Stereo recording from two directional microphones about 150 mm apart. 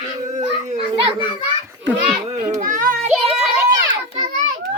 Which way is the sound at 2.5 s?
60° right (ahead or behind).